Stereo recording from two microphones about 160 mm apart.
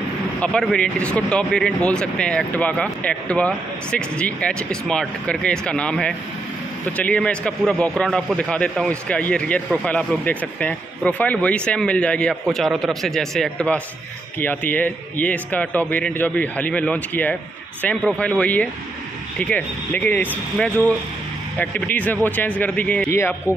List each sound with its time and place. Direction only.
0.4 s speech: 5° left (ahead or behind)